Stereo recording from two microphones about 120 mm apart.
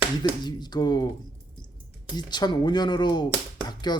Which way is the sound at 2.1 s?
35° left (ahead or behind).